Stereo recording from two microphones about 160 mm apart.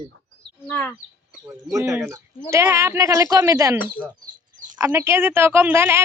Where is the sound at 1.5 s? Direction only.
20° right (ahead or behind).